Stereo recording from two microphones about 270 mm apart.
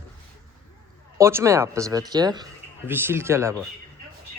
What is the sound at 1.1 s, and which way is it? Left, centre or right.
Speech, centre.